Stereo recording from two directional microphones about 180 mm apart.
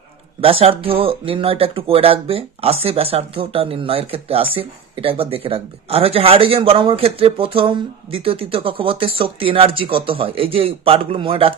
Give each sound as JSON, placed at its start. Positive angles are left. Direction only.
{"t": 0.4, "sound": "speech", "side_deg": -30}